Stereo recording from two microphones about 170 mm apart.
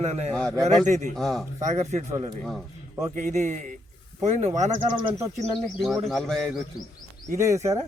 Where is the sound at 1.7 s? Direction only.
45° right (ahead or behind).